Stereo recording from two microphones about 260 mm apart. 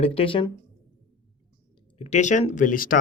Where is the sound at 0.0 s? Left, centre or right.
Left.